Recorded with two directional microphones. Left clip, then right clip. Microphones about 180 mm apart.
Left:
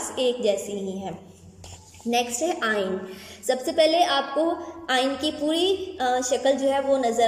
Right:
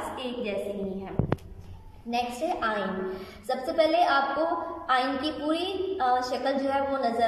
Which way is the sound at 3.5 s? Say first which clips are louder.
Left 4 dB; 25° left (ahead or behind).